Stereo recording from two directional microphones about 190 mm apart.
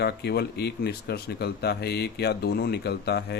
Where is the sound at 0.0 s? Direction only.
60° left (ahead or behind).